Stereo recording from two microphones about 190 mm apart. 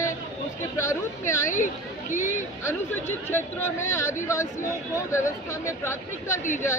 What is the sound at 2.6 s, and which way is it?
Speech, 10° left (ahead or behind).